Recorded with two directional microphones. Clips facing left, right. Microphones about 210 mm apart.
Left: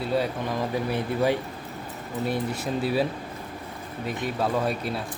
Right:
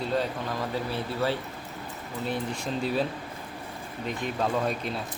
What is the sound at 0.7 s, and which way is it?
Speech, 15° left (ahead or behind).